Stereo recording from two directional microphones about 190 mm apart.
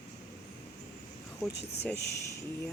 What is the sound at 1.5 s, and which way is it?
Speech, 60° left (ahead or behind).